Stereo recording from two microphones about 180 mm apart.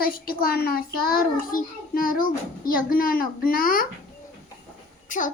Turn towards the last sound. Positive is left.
turn(degrees=45)  # may be behind; listen again after turning